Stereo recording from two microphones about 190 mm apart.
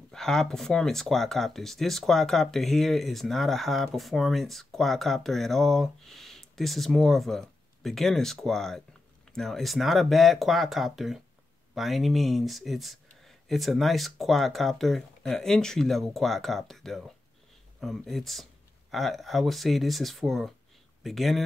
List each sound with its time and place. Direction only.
0.1 s speech: 5° left (ahead or behind)